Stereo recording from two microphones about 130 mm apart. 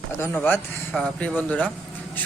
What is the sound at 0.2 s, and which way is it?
Speech, 15° left (ahead or behind).